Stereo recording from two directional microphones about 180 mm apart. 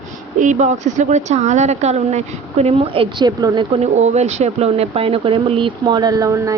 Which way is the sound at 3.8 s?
40° right (ahead or behind).